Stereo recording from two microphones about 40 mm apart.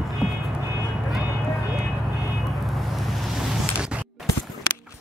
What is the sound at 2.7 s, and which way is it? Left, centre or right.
Vehicle, centre.